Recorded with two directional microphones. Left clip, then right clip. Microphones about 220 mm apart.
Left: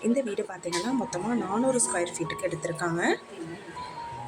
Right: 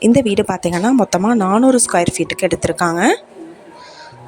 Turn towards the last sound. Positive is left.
turn(degrees=-40)  # may be behind; listen again after turning